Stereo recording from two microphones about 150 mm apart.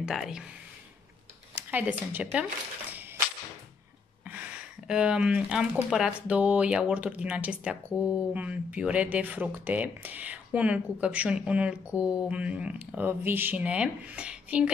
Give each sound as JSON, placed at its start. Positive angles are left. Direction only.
{"t": 0.0, "sound": "speech", "side_deg": -5}
{"t": 1.7, "sound": "speech", "side_deg": -10}
{"t": 4.3, "sound": "speech", "side_deg": -10}